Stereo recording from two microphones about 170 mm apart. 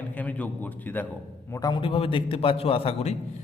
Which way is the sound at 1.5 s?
20° left (ahead or behind).